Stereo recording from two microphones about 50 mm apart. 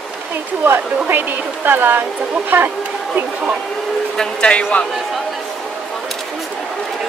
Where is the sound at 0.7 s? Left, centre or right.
Right.